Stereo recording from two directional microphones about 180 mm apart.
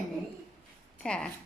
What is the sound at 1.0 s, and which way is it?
Speech, 5° left (ahead or behind).